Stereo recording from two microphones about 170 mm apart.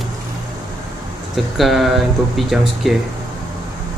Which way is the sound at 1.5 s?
Centre (ahead or behind).